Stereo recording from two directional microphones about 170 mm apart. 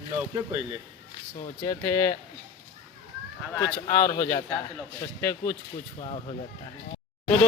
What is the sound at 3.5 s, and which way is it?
Speech, 20° left (ahead or behind).